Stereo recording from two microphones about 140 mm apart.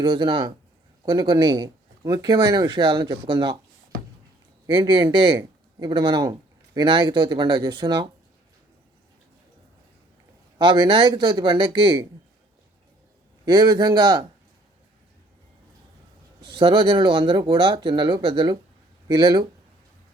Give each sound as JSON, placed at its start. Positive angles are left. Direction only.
{"t": 0.0, "sound": "speech", "side_deg": -35}
{"t": 4.7, "sound": "speech", "side_deg": -35}
{"t": 10.6, "sound": "speech", "side_deg": -35}
{"t": 13.4, "sound": "speech", "side_deg": -35}
{"t": 16.4, "sound": "speech", "side_deg": -35}